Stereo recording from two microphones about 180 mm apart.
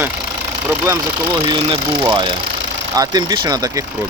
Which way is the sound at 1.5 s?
25° right (ahead or behind).